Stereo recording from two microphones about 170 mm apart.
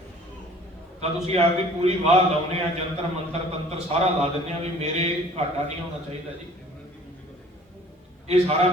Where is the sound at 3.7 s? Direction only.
40° right (ahead or behind).